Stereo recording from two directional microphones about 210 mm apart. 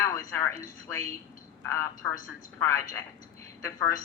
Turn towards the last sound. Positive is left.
turn(degrees=15)  # may be behind; listen again after turning